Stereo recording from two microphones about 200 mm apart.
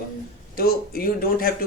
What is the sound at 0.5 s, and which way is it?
Speech, 50° left (ahead or behind).